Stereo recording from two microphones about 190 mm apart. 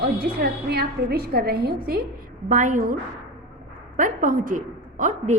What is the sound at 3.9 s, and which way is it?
A woman's voice, 45° right (ahead or behind).